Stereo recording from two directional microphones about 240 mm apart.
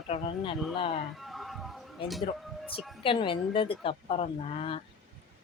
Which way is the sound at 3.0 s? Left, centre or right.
Left.